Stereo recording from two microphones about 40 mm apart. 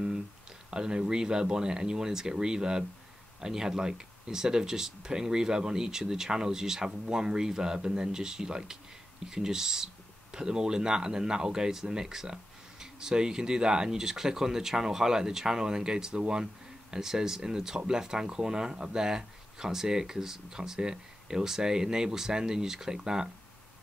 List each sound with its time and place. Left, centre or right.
0.7 s speech: centre
16.9 s speech: centre